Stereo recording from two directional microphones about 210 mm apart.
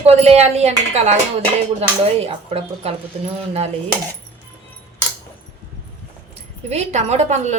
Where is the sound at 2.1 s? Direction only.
30° right (ahead or behind).